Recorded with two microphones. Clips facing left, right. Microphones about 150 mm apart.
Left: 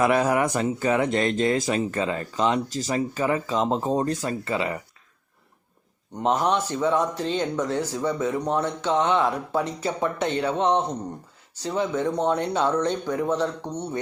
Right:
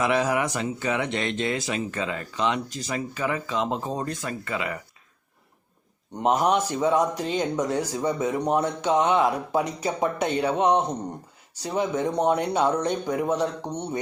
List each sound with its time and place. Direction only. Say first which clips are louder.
0.0 s speech: left 3 dB; 50° left (ahead or behind); by 4.8 s 30° left (ahead or behind)
6.2 s speech: right 1 dB; 15° right (ahead or behind)